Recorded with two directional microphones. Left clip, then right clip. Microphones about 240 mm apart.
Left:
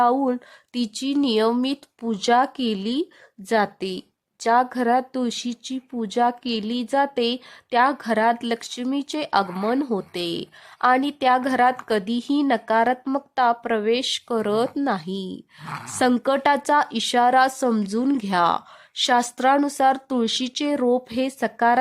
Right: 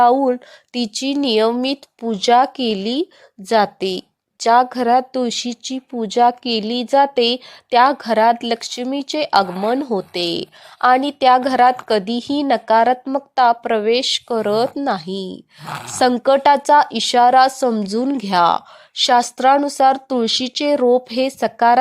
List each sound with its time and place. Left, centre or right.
0.0 s speech: centre
15.6 s speech: right
16.0 s speech: centre